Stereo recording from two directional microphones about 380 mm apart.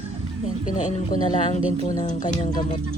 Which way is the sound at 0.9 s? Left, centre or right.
Centre.